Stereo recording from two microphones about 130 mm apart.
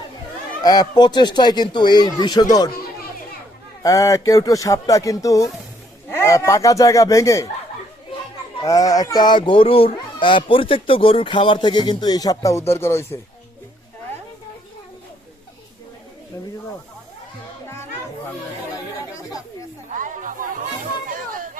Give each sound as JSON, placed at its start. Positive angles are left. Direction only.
{"t": 0.6, "sound": "speech", "side_deg": 30}
{"t": 3.8, "sound": "speech", "side_deg": 25}
{"t": 8.6, "sound": "speech", "side_deg": 25}
{"t": 19.9, "sound": "chatter", "side_deg": -85}
{"t": 21.1, "sound": "hubbub", "side_deg": -90}